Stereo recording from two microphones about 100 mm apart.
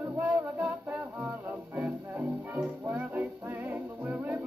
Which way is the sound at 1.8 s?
15° right (ahead or behind).